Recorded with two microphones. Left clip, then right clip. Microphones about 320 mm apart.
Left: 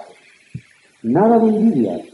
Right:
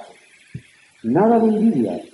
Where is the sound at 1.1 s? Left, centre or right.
Left.